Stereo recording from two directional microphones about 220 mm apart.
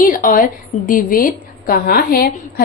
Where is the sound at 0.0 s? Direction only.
40° left (ahead or behind).